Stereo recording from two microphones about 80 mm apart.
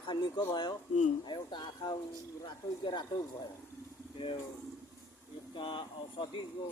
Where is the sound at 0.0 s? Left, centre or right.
Left.